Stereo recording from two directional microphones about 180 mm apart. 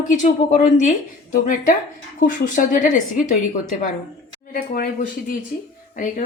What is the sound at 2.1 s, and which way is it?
A woman's voice, 45° left (ahead or behind).